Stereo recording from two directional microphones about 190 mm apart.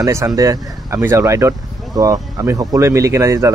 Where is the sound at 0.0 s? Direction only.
15° right (ahead or behind).